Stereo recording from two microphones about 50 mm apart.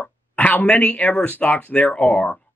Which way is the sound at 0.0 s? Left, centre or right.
Left.